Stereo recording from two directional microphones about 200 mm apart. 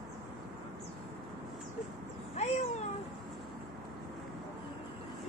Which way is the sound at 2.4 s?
35° left (ahead or behind).